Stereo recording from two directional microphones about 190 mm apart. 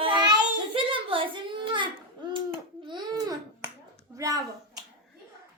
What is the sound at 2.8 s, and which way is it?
Babbling, 20° right (ahead or behind).